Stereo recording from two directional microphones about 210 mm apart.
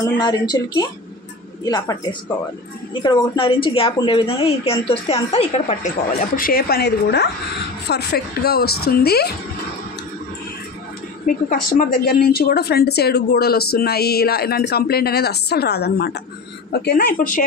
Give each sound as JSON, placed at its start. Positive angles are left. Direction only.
{"t": 0.0, "sound": "a woman's voice", "side_deg": 20}
{"t": 11.2, "sound": "a woman's voice", "side_deg": 40}